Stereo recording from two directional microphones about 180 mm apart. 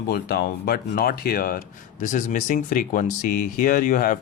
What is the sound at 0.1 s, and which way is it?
Speech, 60° left (ahead or behind).